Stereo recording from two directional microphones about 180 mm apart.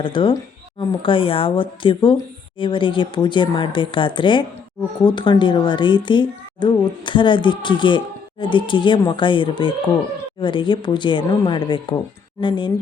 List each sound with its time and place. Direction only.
0.0 s a woman's voice: 25° left (ahead or behind)